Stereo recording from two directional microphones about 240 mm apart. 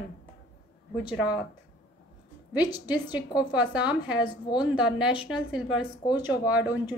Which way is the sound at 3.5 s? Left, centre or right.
Centre.